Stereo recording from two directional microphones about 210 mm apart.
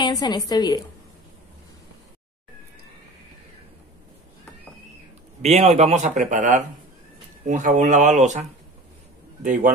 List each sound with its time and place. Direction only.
0.0 s a woman's voice: 20° left (ahead or behind)
5.4 s speech: 30° right (ahead or behind)